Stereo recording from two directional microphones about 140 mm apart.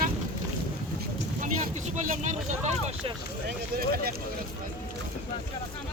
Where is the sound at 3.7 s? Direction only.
90° right.